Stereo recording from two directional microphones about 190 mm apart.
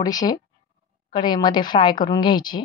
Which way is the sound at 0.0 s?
20° left (ahead or behind).